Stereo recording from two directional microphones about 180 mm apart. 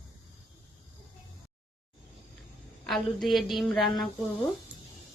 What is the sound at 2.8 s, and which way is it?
A woman's voice, centre (ahead or behind).